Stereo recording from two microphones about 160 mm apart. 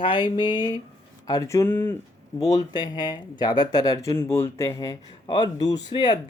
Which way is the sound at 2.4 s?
25° left (ahead or behind).